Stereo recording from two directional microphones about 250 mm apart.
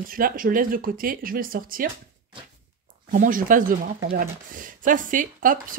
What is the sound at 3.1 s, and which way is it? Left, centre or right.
Speech, right.